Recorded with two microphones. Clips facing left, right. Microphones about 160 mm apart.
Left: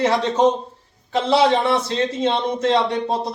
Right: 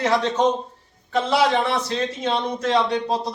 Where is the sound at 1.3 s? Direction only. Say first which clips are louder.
Left 4 dB; 25° left (ahead or behind).